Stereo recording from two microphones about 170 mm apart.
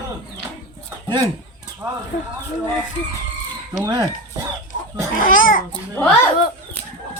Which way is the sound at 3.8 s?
20° right (ahead or behind).